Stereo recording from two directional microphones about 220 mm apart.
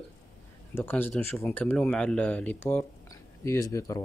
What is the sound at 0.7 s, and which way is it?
Speech, 10° left (ahead or behind).